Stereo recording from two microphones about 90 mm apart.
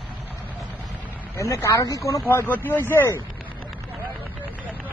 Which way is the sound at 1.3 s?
30° left (ahead or behind).